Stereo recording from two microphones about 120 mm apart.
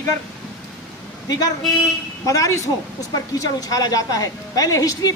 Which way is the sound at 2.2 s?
25° left (ahead or behind).